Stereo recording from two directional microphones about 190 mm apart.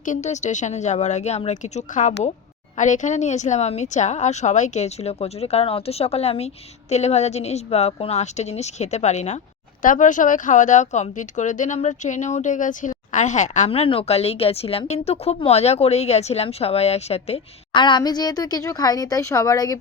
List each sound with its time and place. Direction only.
0.0 s speech: 40° left (ahead or behind); by 19.7 s 20° left (ahead or behind)